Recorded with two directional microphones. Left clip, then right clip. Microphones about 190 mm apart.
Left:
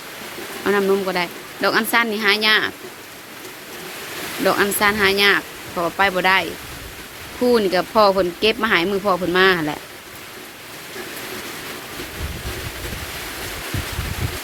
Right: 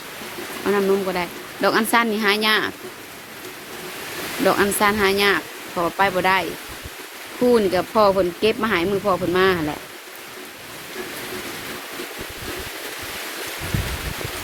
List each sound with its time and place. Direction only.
0.6 s speech: centre (ahead or behind)
1.6 s speech: 15° right (ahead or behind)
4.4 s speech: 10° right (ahead or behind)